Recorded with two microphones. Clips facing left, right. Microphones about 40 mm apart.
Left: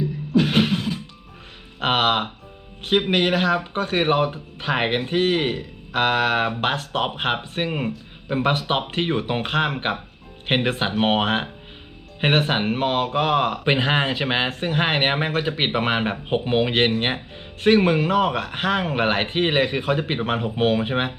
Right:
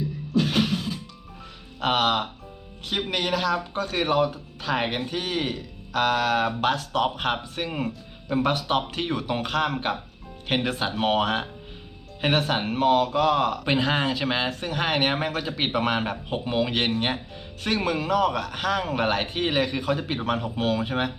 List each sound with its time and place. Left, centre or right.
0.3 s music: left
1.8 s speech: left